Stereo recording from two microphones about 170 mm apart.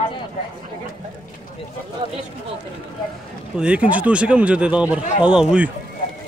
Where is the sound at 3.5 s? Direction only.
5° right (ahead or behind).